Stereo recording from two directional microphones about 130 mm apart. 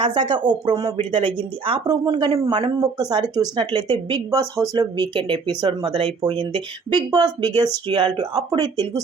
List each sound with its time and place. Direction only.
0.0 s speech: 35° right (ahead or behind)